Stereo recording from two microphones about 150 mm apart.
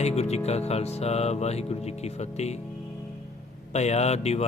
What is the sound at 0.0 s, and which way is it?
Speech, 45° left (ahead or behind).